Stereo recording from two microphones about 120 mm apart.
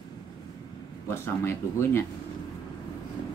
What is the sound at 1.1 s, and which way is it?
Speech, 20° left (ahead or behind).